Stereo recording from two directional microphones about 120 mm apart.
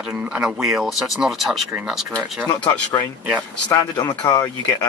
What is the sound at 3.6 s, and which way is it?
Speech, 35° left (ahead or behind).